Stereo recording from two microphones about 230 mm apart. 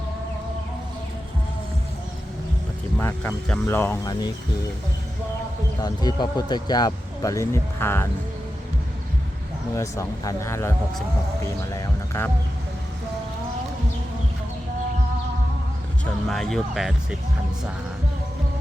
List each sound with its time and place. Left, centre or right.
3.0 s speech: centre
5.8 s speech: centre
9.7 s speech: centre
16.3 s speech: centre